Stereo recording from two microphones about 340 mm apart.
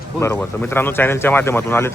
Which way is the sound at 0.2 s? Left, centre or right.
Centre.